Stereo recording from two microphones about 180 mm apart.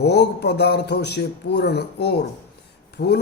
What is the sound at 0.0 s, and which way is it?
A man's voice, 70° left (ahead or behind).